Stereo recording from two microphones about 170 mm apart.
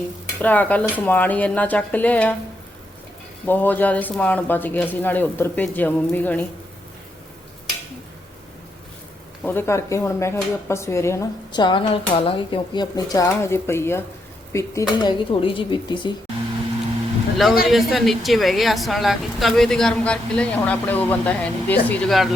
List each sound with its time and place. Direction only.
0.4 s speech: 10° left (ahead or behind)
3.4 s speech: 10° left (ahead or behind)
9.4 s speech: 15° left (ahead or behind)
15.3 s speech: 30° left (ahead or behind)
17.3 s a man's voice: centre (ahead or behind)